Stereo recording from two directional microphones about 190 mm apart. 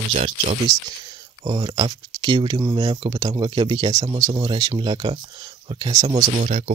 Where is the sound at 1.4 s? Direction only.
20° right (ahead or behind).